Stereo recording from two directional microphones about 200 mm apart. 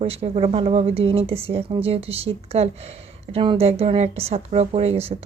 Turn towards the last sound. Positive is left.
turn(degrees=-30)  # may be behind; listen again after turning